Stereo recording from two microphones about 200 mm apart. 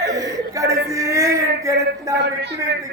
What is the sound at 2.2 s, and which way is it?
Speech, 60° right (ahead or behind).